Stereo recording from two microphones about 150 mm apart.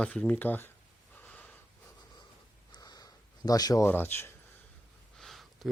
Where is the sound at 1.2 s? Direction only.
10° left (ahead or behind).